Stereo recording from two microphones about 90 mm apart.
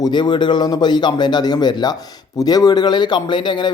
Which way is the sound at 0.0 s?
55° left (ahead or behind).